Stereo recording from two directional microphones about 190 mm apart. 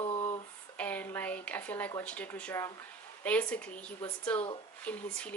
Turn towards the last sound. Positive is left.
turn(degrees=5)  # may be behind; listen again after turning